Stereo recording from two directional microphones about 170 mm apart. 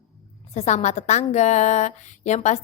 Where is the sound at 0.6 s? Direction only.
40° left (ahead or behind).